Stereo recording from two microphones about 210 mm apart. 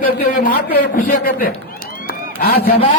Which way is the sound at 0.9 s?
40° left (ahead or behind).